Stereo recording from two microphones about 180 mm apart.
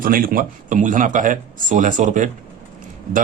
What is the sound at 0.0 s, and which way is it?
Speech, 50° right (ahead or behind).